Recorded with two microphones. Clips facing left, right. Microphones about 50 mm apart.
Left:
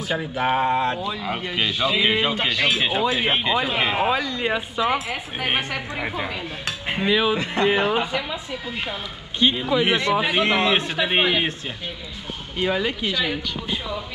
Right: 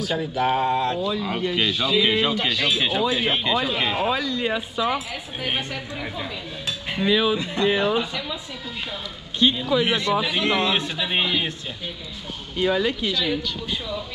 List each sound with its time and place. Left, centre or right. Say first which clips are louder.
0.0 s a woman's voice: right 1 dB; left
7.3 s a woman's voice: left 1 dB; left
9.9 s speech: left 2 dB; left
12.5 s speech: right 1 dB; left